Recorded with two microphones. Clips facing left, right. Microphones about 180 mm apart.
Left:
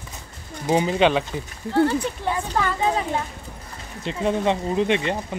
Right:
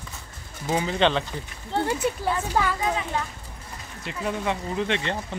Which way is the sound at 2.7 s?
30° left (ahead or behind).